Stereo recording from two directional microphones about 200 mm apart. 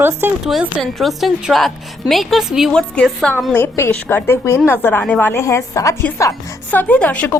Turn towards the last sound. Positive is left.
turn(degrees=10)  # may be behind; listen again after turning